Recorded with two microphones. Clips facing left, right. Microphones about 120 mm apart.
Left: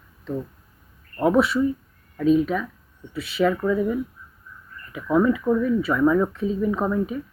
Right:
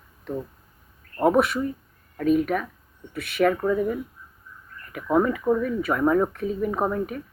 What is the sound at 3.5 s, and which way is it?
Speech, 25° right (ahead or behind).